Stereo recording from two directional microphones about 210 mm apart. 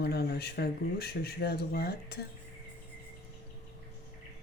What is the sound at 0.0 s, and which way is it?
Speech, 50° left (ahead or behind).